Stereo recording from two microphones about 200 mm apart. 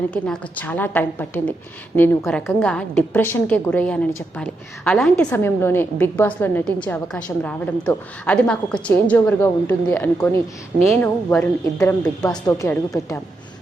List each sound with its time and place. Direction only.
0.1 s a woman's voice: 5° left (ahead or behind)